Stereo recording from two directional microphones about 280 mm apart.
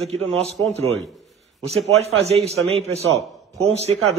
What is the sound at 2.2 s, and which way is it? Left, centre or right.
Speech, right.